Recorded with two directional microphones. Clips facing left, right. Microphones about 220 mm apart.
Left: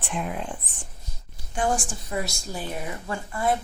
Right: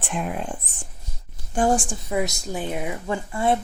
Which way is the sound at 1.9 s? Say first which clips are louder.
Right 5 dB; 15° right (ahead or behind).